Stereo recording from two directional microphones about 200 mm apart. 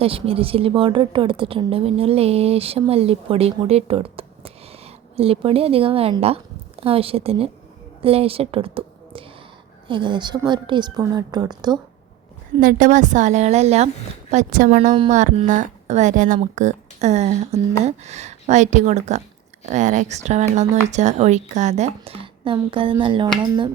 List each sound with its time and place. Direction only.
0.0 s a woman's voice: 30° right (ahead or behind)
12.5 s speech: 40° right (ahead or behind)
14.8 s a woman's voice: 30° right (ahead or behind)